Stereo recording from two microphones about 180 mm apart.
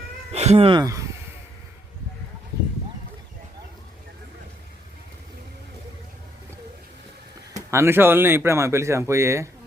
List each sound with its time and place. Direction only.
0.3 s speech: 35° right (ahead or behind); by 1.0 s 20° right (ahead or behind)
7.7 s speech: 15° right (ahead or behind)